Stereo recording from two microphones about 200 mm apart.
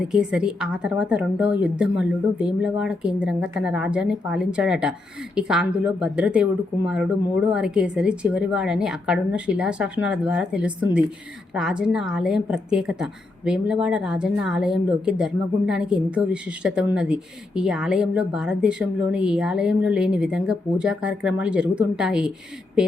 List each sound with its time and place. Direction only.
0.1 s a woman's voice: 5° right (ahead or behind)